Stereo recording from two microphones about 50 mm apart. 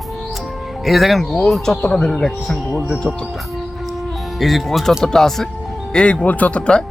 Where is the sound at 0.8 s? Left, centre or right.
Centre.